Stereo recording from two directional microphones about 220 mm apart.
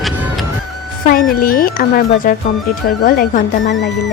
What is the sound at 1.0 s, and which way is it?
Speech, 40° left (ahead or behind).